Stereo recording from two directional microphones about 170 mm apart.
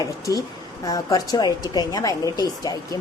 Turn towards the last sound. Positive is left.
turn(degrees=20)  # may be behind; listen again after turning